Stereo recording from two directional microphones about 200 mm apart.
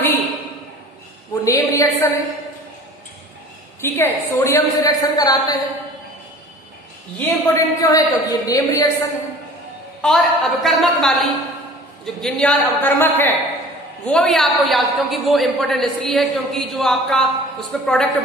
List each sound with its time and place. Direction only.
1.3 s a woman's voice: 15° left (ahead or behind)
3.8 s a woman's voice: 10° left (ahead or behind)
7.2 s a woman's voice: 10° left (ahead or behind)
10.0 s a woman's voice: centre (ahead or behind)